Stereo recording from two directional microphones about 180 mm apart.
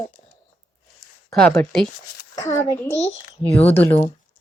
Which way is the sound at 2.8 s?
40° left (ahead or behind).